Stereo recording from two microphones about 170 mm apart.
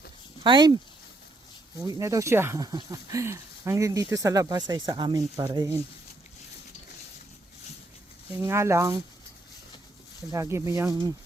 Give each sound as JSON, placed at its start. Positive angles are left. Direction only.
{"t": 0.4, "sound": "speech", "side_deg": -25}
{"t": 1.9, "sound": "speech", "side_deg": -20}
{"t": 8.4, "sound": "speech", "side_deg": -15}
{"t": 10.3, "sound": "speech", "side_deg": -20}